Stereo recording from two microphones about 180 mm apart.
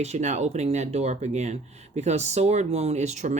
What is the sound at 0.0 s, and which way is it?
Speech, 40° right (ahead or behind).